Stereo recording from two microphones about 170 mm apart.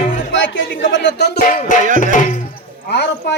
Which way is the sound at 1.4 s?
45° left (ahead or behind).